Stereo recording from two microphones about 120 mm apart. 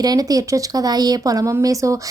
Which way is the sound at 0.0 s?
30° right (ahead or behind).